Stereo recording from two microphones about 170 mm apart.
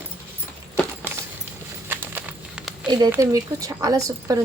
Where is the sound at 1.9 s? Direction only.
10° right (ahead or behind).